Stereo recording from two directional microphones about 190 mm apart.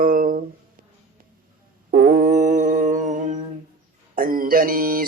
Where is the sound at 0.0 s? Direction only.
50° right (ahead or behind).